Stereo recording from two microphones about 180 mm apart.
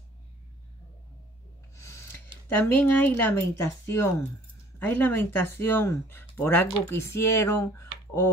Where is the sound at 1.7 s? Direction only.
15° left (ahead or behind).